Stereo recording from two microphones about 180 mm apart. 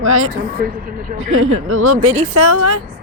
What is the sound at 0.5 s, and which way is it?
Speech, 50° right (ahead or behind).